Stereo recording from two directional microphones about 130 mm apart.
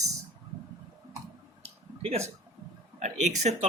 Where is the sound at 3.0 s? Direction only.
60° right (ahead or behind).